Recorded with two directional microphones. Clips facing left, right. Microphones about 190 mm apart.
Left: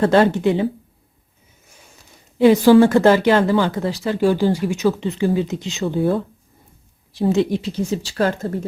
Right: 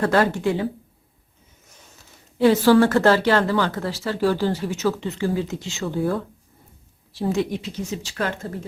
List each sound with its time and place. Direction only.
0.0 s speech: 25° left (ahead or behind)
1.6 s a sound: 10° left (ahead or behind)
2.4 s speech: 15° left (ahead or behind); by 8.4 s 35° left (ahead or behind)